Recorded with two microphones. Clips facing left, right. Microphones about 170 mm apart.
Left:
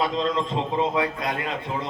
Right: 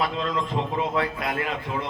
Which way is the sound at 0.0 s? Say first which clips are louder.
Left 2 dB; 25° left (ahead or behind).